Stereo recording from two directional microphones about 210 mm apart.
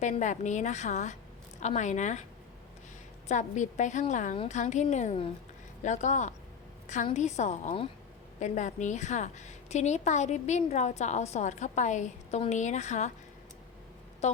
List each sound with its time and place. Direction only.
0.0 s a woman's voice: 35° left (ahead or behind)
3.2 s a woman's voice: 35° left (ahead or behind)